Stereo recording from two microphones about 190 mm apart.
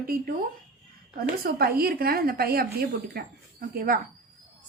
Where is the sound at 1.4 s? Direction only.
55° right (ahead or behind).